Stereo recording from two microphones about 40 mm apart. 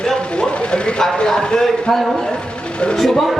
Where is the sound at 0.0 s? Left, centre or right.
Centre.